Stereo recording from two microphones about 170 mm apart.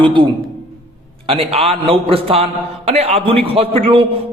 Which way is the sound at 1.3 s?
35° right (ahead or behind).